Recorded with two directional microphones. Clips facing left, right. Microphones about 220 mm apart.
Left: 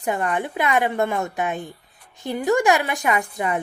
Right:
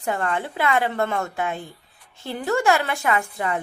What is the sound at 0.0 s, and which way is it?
Speech, 15° left (ahead or behind).